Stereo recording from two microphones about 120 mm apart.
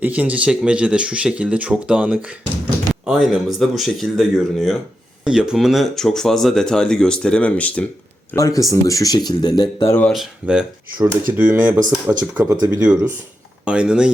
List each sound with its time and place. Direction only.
0.0 s speech: 15° right (ahead or behind); by 7.9 s 10° left (ahead or behind)
8.4 s speech: 30° left (ahead or behind)
10.1 s speech: 5° right (ahead or behind)
11.0 s speech: 20° right (ahead or behind)
12.4 s speech: 25° right (ahead or behind)
13.7 s speech: 5° right (ahead or behind)